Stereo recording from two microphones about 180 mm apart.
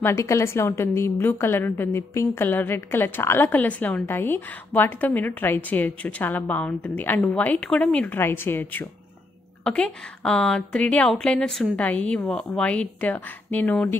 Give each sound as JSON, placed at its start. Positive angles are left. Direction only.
{"t": 0.0, "sound": "a woman's voice", "side_deg": 15}